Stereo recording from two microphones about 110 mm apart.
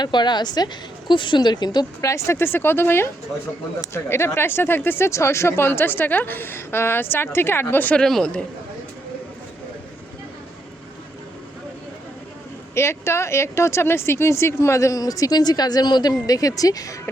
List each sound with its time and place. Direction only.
0.0 s a woman's voice: 40° left (ahead or behind)
2.0 s speech: 25° left (ahead or behind); by 8.4 s 10° left (ahead or behind)
12.7 s speech: 25° left (ahead or behind)